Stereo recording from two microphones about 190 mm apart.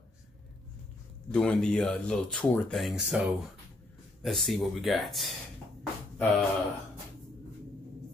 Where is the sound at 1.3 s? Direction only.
5° left (ahead or behind).